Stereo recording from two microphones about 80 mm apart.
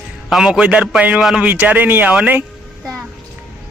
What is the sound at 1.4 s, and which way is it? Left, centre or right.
Speech, centre.